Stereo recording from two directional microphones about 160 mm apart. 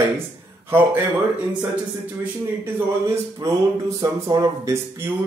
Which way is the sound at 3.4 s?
20° right (ahead or behind).